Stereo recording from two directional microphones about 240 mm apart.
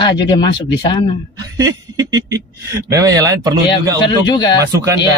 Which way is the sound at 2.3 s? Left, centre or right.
Centre.